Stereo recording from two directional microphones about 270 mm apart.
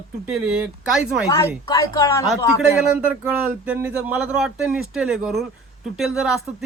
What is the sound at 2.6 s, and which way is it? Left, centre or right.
Speech, centre.